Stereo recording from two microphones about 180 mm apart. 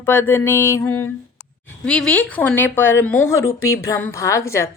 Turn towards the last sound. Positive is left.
turn(degrees=15)  # may be behind; listen again after turning